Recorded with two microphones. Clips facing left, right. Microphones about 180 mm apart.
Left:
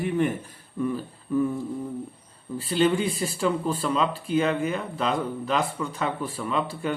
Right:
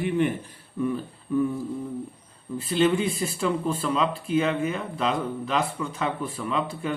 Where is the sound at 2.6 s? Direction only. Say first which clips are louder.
Even; 35° left (ahead or behind).